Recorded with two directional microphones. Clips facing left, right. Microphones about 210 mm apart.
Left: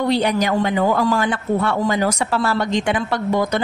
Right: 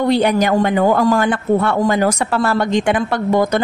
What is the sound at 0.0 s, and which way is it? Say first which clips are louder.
A man's voice: right 4 dB; 50° right (ahead or behind).